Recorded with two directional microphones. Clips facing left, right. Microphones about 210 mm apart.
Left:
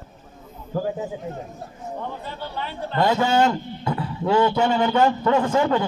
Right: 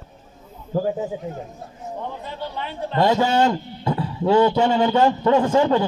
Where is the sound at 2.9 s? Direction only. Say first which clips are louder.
Right 1 dB; 20° right (ahead or behind).